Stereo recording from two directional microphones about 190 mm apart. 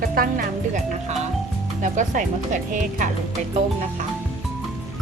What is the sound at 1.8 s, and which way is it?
Speech, 40° right (ahead or behind).